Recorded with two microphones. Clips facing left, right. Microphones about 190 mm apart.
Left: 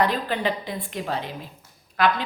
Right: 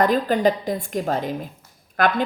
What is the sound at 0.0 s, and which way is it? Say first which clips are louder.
A woman's voice: right 6 dB; 45° right (ahead or behind).